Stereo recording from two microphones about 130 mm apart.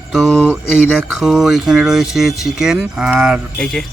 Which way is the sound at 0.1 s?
Centre (ahead or behind).